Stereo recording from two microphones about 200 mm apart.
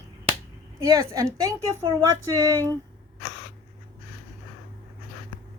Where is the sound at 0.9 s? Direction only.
15° right (ahead or behind).